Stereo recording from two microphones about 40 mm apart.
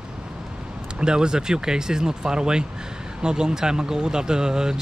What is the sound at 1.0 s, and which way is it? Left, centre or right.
Speech, right.